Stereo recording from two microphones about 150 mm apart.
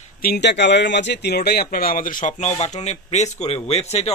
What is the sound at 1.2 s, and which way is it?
Speech, 90° left.